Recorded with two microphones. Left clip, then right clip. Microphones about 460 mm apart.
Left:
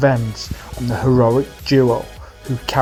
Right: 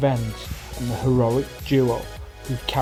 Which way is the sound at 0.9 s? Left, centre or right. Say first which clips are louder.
Left 7 dB; right.